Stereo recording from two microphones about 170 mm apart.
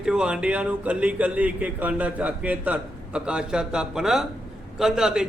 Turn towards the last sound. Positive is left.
turn(degrees=-5)  # may be behind; listen again after turning